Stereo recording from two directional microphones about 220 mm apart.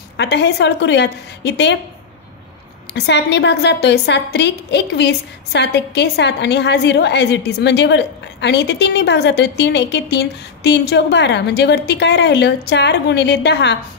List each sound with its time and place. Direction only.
0.2 s a woman's voice: 50° left (ahead or behind)
2.9 s a woman's voice: 50° left (ahead or behind)